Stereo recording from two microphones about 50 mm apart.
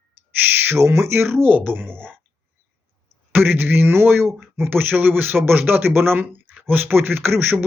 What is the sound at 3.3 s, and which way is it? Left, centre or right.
Speech, right.